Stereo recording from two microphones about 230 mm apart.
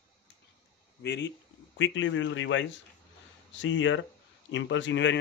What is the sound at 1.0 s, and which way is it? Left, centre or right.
A man's voice, left.